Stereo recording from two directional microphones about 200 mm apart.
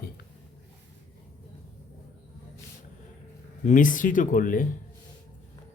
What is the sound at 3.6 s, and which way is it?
Speech, 40° left (ahead or behind).